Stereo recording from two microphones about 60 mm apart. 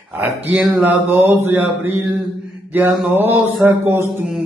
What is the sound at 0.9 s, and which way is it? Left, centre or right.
Mantra, right.